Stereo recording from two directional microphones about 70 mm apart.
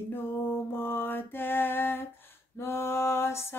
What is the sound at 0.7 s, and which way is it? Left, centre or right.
Mantra, left.